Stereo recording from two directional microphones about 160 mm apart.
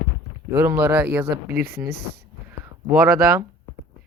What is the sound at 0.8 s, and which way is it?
Speech, 10° right (ahead or behind).